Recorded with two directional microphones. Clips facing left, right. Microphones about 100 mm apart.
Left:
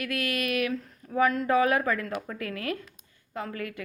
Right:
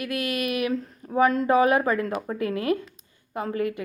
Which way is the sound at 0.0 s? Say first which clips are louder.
Right 3 dB; 15° right (ahead or behind).